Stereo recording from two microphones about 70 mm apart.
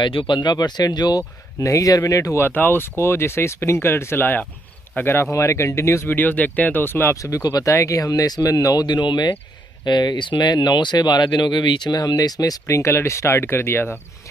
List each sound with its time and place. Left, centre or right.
0.4 s speech: left
1.6 s speech: left
2.4 s speech: left
5.3 s speech: left
6.1 s speech: left
7.2 s speech: left